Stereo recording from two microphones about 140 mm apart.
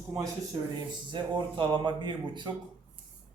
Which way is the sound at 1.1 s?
35° right (ahead or behind).